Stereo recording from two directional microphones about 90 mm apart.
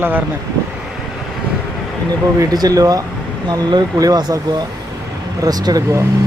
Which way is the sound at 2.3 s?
45° right (ahead or behind).